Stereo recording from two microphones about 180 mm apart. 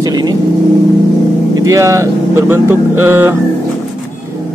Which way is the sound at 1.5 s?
20° right (ahead or behind).